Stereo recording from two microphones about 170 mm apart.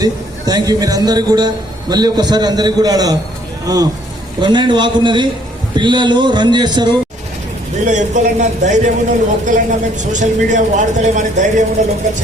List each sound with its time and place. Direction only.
0.0 s a man's voice: 20° right (ahead or behind)
7.9 s speech: 45° right (ahead or behind)